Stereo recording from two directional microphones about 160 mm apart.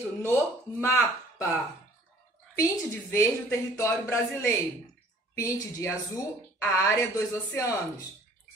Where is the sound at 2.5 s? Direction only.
20° left (ahead or behind).